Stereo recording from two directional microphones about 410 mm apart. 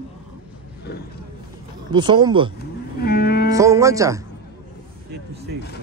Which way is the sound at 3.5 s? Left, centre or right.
Centre.